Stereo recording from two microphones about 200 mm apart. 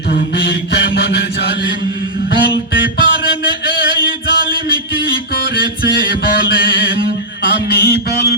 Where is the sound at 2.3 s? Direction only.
20° right (ahead or behind).